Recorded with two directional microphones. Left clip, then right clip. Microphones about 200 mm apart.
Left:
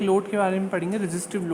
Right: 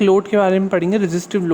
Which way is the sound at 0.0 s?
45° right (ahead or behind).